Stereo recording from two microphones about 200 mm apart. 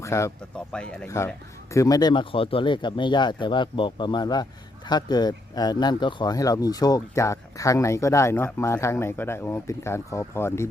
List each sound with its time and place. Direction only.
0.0 s speech: 15° left (ahead or behind)